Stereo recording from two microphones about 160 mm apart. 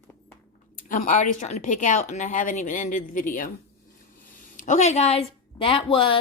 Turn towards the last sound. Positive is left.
turn(degrees=35)  # may be behind; listen again after turning